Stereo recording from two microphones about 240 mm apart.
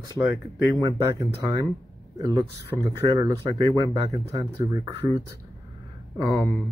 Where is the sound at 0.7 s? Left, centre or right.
Centre.